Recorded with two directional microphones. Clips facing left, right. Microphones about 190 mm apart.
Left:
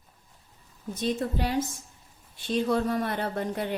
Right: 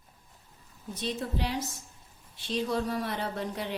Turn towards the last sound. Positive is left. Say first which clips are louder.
# left 4 dB
turn(degrees=55)  # may be behind; listen again after turning